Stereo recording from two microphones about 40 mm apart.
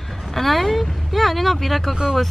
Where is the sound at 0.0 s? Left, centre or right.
Centre.